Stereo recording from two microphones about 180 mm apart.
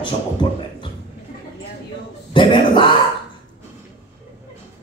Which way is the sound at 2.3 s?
25° left (ahead or behind).